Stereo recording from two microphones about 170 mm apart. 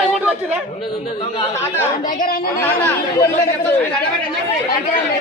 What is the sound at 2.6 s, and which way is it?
Speech, 15° left (ahead or behind).